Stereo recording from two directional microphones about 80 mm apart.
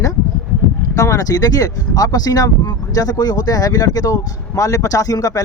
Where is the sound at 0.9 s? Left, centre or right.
Left.